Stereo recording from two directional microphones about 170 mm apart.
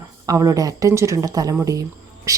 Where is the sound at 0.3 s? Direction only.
20° right (ahead or behind).